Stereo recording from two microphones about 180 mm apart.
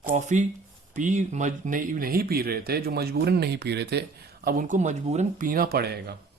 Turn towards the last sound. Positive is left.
turn(degrees=-60)  # may be behind; listen again after turning